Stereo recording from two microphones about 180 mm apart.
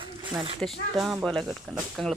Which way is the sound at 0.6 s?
Centre (ahead or behind).